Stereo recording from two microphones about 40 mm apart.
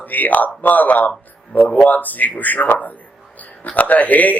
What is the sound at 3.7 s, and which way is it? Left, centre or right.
Speech, left.